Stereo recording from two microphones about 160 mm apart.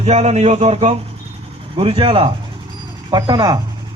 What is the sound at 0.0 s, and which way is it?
A man's voice, 45° right (ahead or behind).